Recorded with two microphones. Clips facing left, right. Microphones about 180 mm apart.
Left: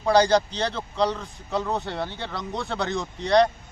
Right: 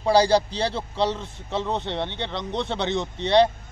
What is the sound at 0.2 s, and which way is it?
Speech, 10° right (ahead or behind).